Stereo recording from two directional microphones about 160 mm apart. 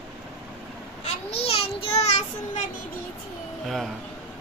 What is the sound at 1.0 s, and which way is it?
Child singing, 40° left (ahead or behind).